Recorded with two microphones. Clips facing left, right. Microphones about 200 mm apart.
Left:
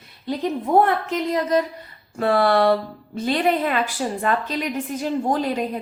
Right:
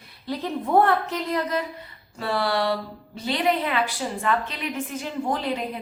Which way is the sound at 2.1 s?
50° left (ahead or behind).